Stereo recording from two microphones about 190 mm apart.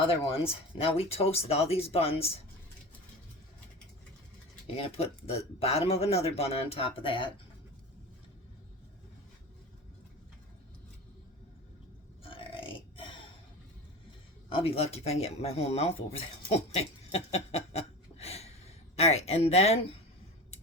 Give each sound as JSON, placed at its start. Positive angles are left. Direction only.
{"t": 0.1, "sound": "speech", "side_deg": 30}
{"t": 4.6, "sound": "speech", "side_deg": 30}
{"t": 12.2, "sound": "burping", "side_deg": 30}
{"t": 14.5, "sound": "speech", "side_deg": 30}